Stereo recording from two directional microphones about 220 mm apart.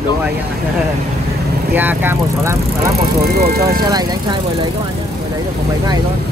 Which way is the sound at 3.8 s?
20° right (ahead or behind).